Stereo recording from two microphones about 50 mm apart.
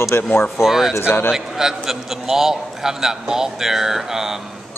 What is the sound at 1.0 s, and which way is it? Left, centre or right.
Speech, left.